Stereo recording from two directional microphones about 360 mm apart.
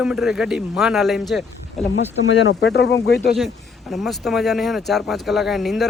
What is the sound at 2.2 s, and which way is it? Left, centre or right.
Speech, left.